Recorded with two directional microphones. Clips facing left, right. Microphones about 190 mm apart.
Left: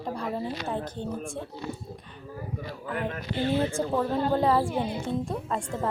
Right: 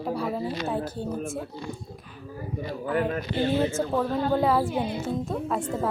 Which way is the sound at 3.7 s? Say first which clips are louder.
Right 1 dB; centre (ahead or behind).